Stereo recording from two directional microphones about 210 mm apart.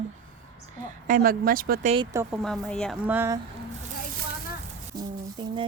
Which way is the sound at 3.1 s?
10° right (ahead or behind).